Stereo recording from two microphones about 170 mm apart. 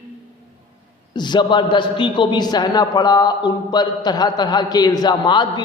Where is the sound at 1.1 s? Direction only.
25° left (ahead or behind).